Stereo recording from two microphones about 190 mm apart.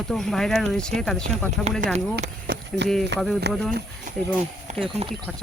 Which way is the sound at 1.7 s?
35° right (ahead or behind).